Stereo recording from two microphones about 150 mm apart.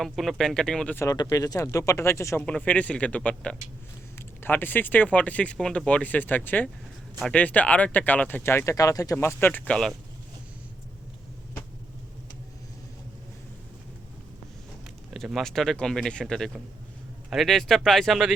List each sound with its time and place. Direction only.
0.0 s speech: centre (ahead or behind)
0.9 s speech: 25° left (ahead or behind); by 9.9 s 5° left (ahead or behind)
15.1 s speech: centre (ahead or behind)